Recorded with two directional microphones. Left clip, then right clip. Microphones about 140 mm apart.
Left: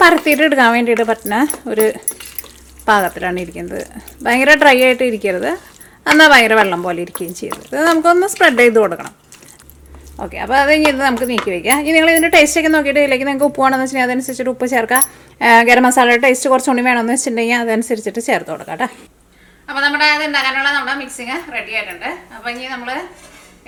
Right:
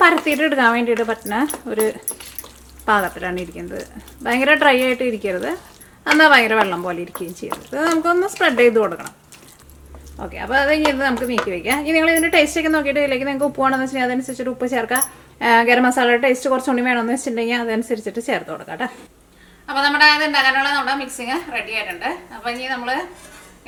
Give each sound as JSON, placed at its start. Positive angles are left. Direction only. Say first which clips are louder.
{"t": 0.3, "sound": "speech", "louder": "left 5 dB", "side_deg": 25}
{"t": 2.8, "sound": "speech", "louder": "left 5 dB", "side_deg": 25}
{"t": 10.2, "sound": "speech", "louder": "left 5 dB", "side_deg": 30}
{"t": 19.6, "sound": "a woman's voice", "louder": "even", "side_deg": 0}